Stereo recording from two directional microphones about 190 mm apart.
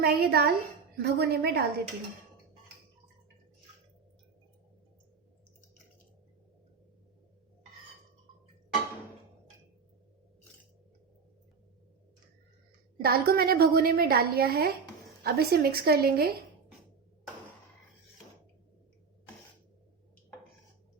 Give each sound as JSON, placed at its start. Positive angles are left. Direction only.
{"t": 0.0, "sound": "a woman's voice", "side_deg": -55}
{"t": 13.0, "sound": "a woman's voice", "side_deg": -55}